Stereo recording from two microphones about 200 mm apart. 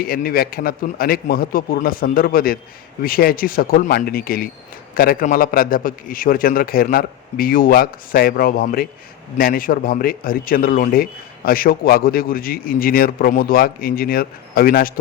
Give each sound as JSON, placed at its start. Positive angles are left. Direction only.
{"t": 0.0, "sound": "a man's voice", "side_deg": 45}